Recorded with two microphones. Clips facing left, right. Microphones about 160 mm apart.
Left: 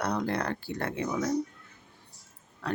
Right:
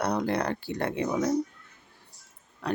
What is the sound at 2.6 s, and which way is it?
Speech, 15° right (ahead or behind).